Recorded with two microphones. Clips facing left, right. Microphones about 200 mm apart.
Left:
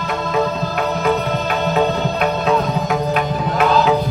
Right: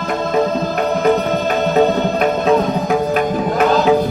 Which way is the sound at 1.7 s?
45° right (ahead or behind).